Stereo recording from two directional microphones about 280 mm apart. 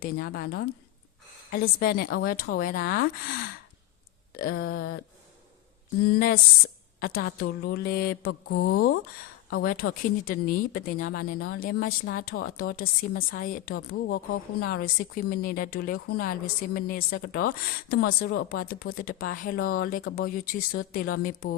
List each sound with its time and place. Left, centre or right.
0.0 s speech: left
6.1 s speech: left